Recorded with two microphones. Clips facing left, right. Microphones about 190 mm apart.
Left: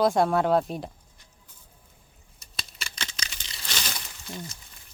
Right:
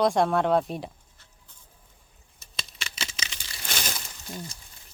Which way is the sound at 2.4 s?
5° right (ahead or behind).